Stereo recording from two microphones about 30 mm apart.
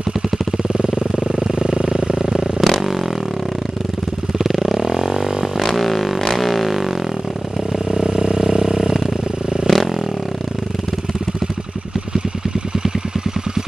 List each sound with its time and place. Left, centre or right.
1.2 s vehicle: centre
4.4 s motorcycle: centre
4.9 s a sound: centre
5.6 s music: centre
7.9 s vehicle: centre
9.7 s a sound: centre